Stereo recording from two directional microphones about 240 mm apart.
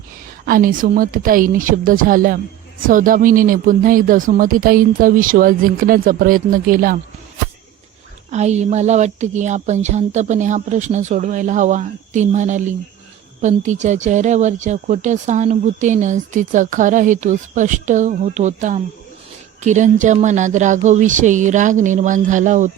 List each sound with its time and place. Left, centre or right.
0.4 s speech: right
8.3 s a woman's voice: right